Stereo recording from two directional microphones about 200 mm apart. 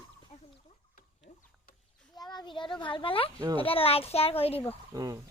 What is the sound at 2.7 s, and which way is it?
Speech, 25° left (ahead or behind).